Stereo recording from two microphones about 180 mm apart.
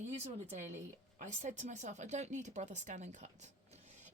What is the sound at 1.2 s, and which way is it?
Speech, 40° right (ahead or behind).